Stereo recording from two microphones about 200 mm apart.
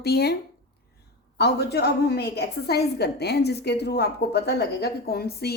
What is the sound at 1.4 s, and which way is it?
A woman's voice, 55° left (ahead or behind).